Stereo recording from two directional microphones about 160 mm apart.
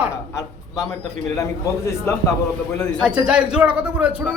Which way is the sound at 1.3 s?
20° left (ahead or behind).